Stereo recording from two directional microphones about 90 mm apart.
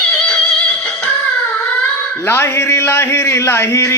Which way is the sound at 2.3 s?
25° left (ahead or behind).